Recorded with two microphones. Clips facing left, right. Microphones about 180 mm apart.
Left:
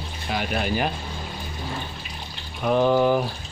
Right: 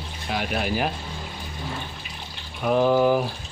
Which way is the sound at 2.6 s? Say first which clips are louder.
Even; 5° right (ahead or behind).